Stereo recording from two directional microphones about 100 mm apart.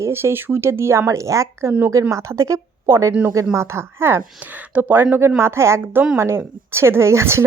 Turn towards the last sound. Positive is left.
turn(degrees=-25)  # may be behind; listen again after turning